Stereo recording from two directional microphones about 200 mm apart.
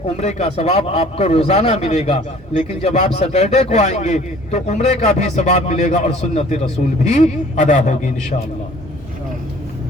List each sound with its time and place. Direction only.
0.0 s a man's voice: 35° left (ahead or behind)